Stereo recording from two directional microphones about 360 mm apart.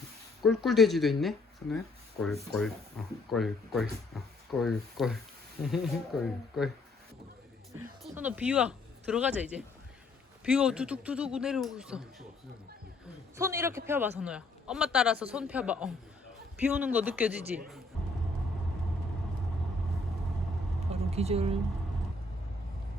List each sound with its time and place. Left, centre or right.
0.6 s a man's voice: centre
8.0 s a man's voice: centre
13.3 s a man's voice: centre
20.9 s a sound: centre